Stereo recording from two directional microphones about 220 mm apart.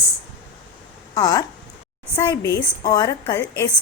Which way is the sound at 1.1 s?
15° left (ahead or behind).